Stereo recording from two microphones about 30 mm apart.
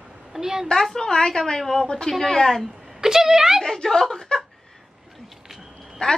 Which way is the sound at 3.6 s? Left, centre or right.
Centre.